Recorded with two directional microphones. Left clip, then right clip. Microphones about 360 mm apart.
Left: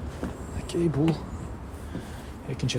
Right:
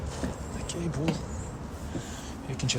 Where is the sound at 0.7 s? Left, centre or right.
Centre.